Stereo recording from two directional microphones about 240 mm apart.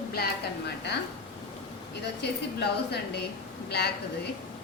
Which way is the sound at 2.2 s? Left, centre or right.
Left.